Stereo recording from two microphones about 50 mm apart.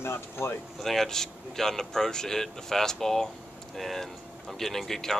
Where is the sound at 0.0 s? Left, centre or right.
Left.